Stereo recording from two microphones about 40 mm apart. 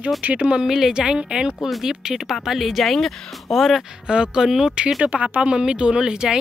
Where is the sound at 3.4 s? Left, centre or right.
Centre.